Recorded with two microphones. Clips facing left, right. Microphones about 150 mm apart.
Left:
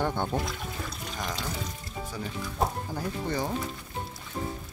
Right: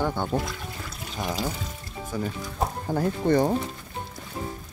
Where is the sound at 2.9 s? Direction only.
60° right (ahead or behind).